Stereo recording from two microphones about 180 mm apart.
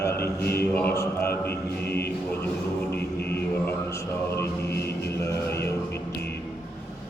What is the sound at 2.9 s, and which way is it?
Music, 65° left (ahead or behind).